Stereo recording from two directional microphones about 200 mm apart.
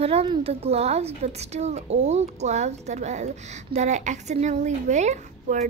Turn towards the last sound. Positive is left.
turn(degrees=-35)  # may be behind; listen again after turning